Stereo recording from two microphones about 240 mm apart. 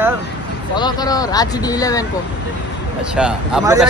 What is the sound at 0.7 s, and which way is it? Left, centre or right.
Speech, centre.